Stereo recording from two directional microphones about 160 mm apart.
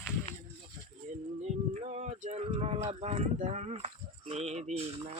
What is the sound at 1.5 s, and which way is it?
Speech, 45° right (ahead or behind).